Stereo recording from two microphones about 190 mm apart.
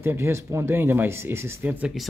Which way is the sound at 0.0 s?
15° right (ahead or behind).